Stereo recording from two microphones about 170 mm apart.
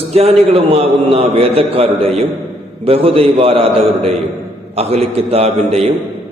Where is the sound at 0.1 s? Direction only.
35° right (ahead or behind).